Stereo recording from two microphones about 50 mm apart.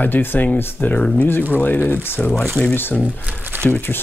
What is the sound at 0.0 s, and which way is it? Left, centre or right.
Speech, left.